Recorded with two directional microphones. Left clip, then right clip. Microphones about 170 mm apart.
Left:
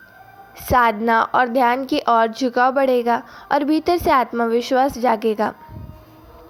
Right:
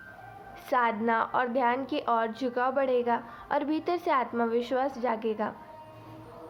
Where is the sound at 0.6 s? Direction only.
45° left (ahead or behind).